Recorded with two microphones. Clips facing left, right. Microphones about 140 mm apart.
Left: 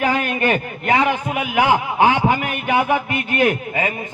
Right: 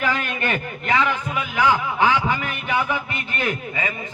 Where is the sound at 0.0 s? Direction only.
45° left (ahead or behind).